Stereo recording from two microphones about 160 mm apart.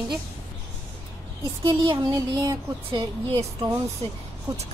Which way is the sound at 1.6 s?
30° right (ahead or behind).